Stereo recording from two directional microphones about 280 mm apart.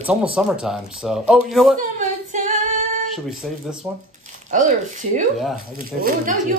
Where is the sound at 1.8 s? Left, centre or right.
Right.